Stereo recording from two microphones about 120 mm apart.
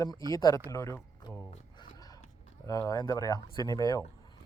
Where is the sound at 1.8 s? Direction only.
35° left (ahead or behind).